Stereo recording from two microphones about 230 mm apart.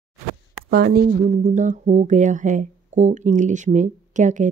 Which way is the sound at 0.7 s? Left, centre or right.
Right.